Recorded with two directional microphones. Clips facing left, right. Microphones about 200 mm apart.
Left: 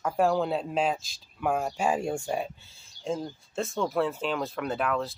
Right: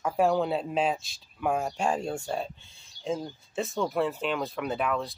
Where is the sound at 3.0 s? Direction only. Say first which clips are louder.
Even; centre (ahead or behind).